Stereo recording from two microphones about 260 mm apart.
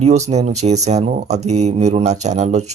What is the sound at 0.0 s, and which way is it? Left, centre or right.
Speech, right.